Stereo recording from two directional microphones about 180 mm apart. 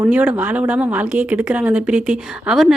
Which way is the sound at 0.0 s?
10° right (ahead or behind).